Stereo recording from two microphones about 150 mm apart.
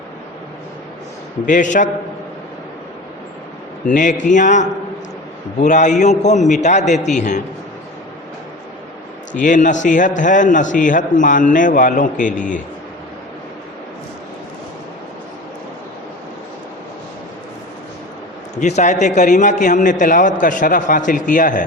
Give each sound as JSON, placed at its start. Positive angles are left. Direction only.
{"t": 1.5, "sound": "a man's voice", "side_deg": 60}
{"t": 3.8, "sound": "a man's voice", "side_deg": 60}
{"t": 9.4, "sound": "a man's voice", "side_deg": 60}
{"t": 18.5, "sound": "a man's voice", "side_deg": 50}